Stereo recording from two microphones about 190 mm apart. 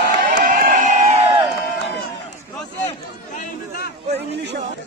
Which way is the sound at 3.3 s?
55° left (ahead or behind).